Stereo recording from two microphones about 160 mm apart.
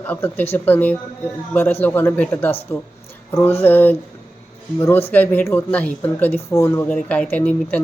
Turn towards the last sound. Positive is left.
turn(degrees=10)  # may be behind; listen again after turning